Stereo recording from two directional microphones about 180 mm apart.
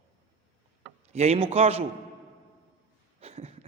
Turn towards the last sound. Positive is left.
turn(degrees=-35)  # may be behind; listen again after turning